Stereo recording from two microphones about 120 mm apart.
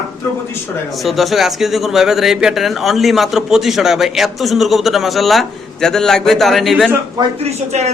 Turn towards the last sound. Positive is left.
turn(degrees=-65)  # may be behind; listen again after turning